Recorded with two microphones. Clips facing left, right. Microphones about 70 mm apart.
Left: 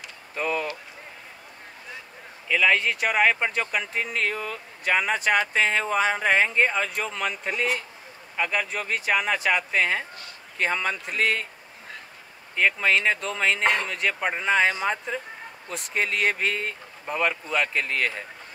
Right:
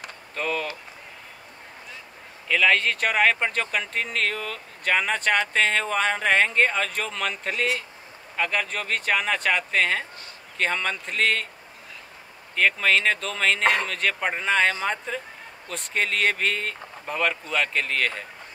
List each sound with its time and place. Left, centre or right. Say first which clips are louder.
0.3 s speech: left 1 dB; centre
2.4 s speech: right 1 dB; centre
12.5 s speech: right 1 dB; centre